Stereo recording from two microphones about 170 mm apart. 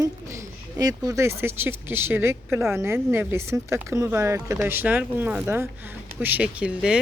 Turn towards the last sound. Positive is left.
turn(degrees=-5)  # may be behind; listen again after turning